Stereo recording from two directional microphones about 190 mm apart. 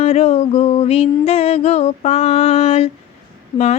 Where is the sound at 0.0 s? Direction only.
35° left (ahead or behind).